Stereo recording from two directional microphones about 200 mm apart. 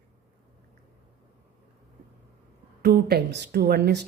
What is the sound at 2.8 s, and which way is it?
Speech, 50° right (ahead or behind).